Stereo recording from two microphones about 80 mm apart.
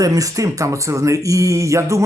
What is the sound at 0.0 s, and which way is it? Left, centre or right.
Speech, right.